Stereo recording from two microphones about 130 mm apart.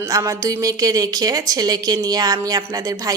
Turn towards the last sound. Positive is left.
turn(degrees=-30)  # may be behind; listen again after turning